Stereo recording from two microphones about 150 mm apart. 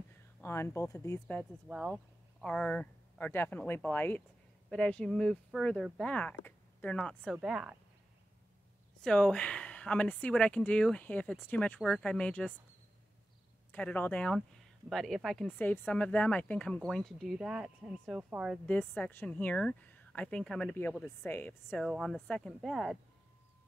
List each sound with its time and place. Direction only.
0.4 s speech: 15° left (ahead or behind)
1.4 s speech: 5° right (ahead or behind)
2.4 s speech: 5° left (ahead or behind)
7.3 s speech: 5° right (ahead or behind)
9.0 s speech: 5° left (ahead or behind)
13.7 s speech: 10° left (ahead or behind); by 18.6 s 5° right (ahead or behind)
18.7 s speech: 10° left (ahead or behind)